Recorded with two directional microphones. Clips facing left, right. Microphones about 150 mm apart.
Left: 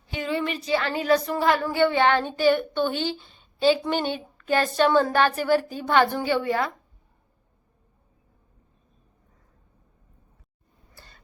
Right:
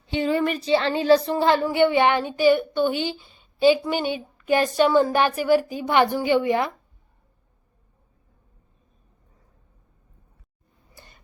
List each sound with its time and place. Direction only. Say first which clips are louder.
0.1 s speech: right 6 dB; 30° right (ahead or behind)
0.3 s speech: right 1 dB; 45° right (ahead or behind)
0.6 s speech: right 4 dB; 30° right (ahead or behind)
10.9 s a sound: right 2 dB; 15° right (ahead or behind)